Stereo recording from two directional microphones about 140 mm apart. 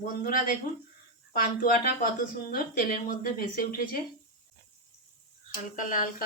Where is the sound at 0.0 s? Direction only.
90° left.